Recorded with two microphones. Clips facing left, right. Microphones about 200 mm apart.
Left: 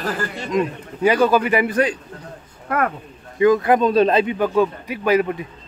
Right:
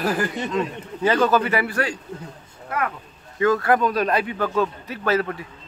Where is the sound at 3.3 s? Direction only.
15° left (ahead or behind).